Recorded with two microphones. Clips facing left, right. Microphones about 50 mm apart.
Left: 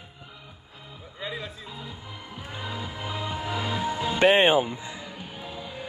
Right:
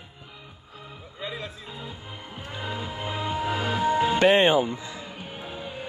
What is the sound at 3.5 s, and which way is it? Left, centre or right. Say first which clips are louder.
Music: right 5 dB; right.